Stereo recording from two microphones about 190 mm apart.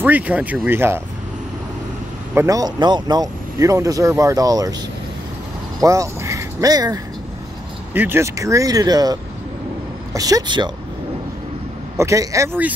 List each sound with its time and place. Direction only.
0.0 s speech: 10° right (ahead or behind)
2.3 s speech: 20° right (ahead or behind)
5.8 s speech: 15° right (ahead or behind)
12.0 s speech: 15° right (ahead or behind)